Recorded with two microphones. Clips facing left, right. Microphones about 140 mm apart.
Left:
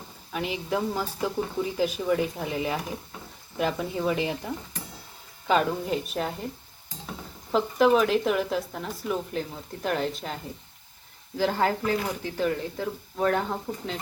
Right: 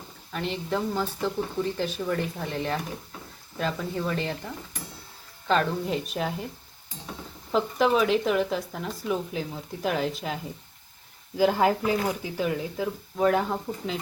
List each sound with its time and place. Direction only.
0.3 s speech: 5° left (ahead or behind)
7.5 s speech: centre (ahead or behind)
11.3 s speech: 15° right (ahead or behind)